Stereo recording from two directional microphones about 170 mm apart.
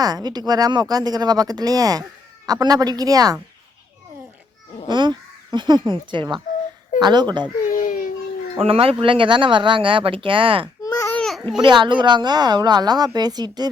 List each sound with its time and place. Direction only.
0.0 s speech: 25° right (ahead or behind)
4.9 s speech: 25° right (ahead or behind)
7.6 s a sound: 50° left (ahead or behind)
8.5 s speech: 35° right (ahead or behind)
10.8 s babbling: 15° left (ahead or behind)
11.2 s a sound: centre (ahead or behind)
11.6 s speech: 30° right (ahead or behind)